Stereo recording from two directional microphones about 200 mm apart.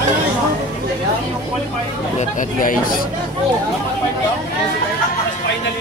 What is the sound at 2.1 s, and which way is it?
Speech, 40° left (ahead or behind).